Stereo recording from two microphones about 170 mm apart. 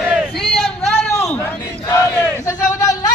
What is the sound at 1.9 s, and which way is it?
Battle cry, 15° left (ahead or behind).